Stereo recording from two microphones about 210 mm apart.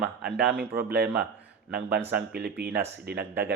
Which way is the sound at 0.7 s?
50° right (ahead or behind).